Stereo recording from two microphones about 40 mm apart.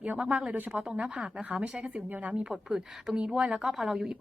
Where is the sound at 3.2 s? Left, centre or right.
Right.